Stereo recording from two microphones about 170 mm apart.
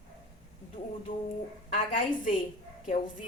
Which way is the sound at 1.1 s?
50° left (ahead or behind).